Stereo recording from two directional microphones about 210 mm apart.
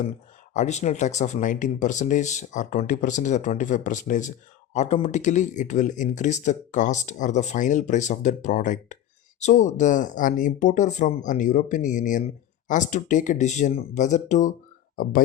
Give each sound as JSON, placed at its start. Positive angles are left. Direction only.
{"t": 0.5, "sound": "speech", "side_deg": 35}